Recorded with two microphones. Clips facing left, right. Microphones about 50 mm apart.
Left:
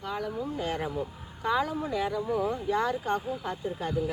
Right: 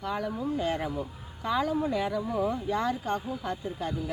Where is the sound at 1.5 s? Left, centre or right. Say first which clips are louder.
Right 1 dB; centre.